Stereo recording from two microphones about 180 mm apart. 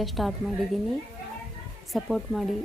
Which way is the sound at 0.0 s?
Centre (ahead or behind).